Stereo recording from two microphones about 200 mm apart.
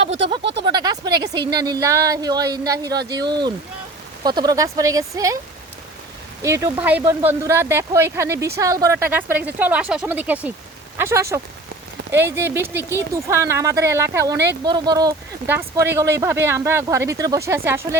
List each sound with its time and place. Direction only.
0.0 s speech: 30° right (ahead or behind)
0.6 s a sound: 20° right (ahead or behind)
1.2 s speech: 20° right (ahead or behind)
6.4 s speech: 15° right (ahead or behind)